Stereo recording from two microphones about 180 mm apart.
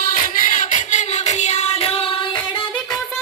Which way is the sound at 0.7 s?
40° left (ahead or behind).